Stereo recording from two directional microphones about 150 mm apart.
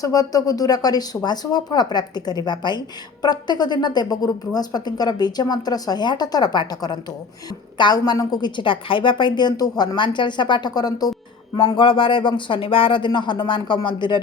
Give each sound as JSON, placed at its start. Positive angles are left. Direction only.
{"t": 0.0, "sound": "a woman's voice", "side_deg": 25}